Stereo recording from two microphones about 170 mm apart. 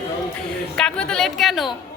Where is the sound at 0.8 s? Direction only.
5° left (ahead or behind).